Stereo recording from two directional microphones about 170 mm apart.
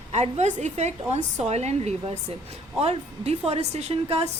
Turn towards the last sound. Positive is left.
turn(degrees=-35)  # may be behind; listen again after turning